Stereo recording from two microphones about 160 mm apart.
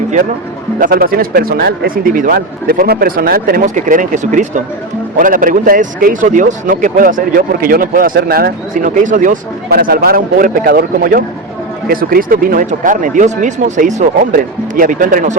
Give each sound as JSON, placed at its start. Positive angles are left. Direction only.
{"t": 0.8, "sound": "speech", "side_deg": -65}
{"t": 3.8, "sound": "a man's voice", "side_deg": -55}